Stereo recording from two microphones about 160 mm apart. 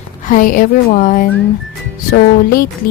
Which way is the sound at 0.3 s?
55° left (ahead or behind).